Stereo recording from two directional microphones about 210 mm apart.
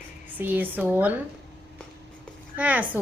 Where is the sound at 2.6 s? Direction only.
5° right (ahead or behind).